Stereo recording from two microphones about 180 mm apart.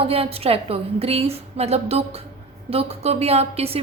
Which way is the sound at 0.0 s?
35° right (ahead or behind).